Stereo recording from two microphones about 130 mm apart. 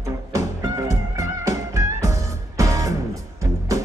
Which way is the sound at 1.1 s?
25° right (ahead or behind).